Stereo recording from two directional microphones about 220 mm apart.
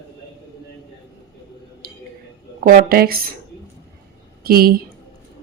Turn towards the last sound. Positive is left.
turn(degrees=-40)  # may be behind; listen again after turning